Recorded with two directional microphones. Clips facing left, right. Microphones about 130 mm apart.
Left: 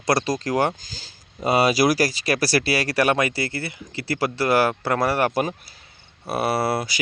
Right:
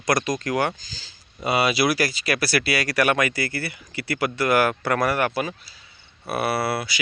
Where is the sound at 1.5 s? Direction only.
40° left (ahead or behind).